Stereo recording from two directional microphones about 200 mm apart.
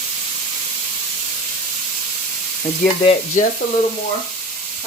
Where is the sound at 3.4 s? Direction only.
40° left (ahead or behind).